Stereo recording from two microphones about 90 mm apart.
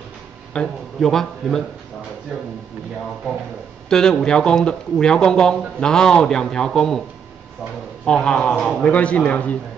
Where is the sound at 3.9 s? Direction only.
5° left (ahead or behind).